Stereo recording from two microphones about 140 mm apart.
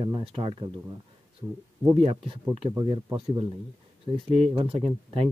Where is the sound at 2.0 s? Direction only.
40° right (ahead or behind).